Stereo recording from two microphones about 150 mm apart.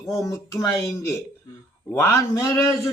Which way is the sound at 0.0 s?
20° left (ahead or behind).